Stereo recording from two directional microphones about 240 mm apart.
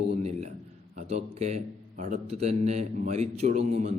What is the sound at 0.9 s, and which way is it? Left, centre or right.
A man's voice, right.